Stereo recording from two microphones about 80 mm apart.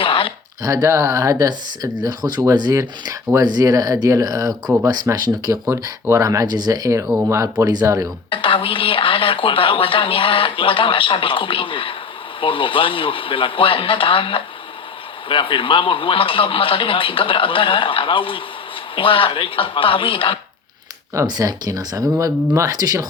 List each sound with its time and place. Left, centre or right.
0.0 s a sound: left
0.6 s speech: right
2.5 s speech: right
6.1 s speech: right
7.3 s speech: right
7.9 s speech: right
8.3 s speech: left
21.2 s speech: right